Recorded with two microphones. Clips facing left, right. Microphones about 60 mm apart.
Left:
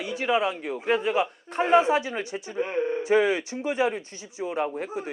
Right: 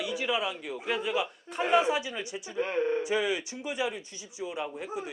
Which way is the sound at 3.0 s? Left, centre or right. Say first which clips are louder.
Left 7 dB; left.